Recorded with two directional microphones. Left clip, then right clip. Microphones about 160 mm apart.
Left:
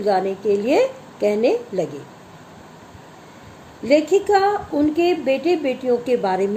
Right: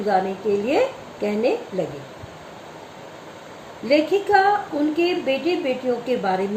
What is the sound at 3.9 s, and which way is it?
A woman's voice, 60° left (ahead or behind).